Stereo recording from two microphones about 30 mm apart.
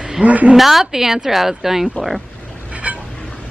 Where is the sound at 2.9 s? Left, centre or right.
Right.